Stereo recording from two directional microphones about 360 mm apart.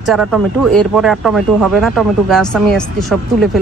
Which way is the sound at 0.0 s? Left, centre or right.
Centre.